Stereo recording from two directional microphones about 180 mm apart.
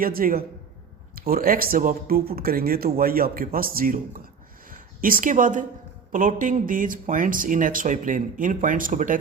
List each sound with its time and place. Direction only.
0.0 s speech: 55° right (ahead or behind)